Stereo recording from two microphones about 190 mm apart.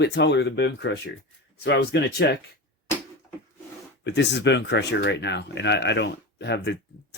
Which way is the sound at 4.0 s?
65° left (ahead or behind).